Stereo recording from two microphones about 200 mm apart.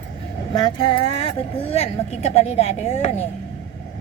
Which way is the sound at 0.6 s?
25° left (ahead or behind).